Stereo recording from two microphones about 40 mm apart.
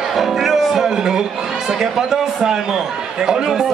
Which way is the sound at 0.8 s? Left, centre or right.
Centre.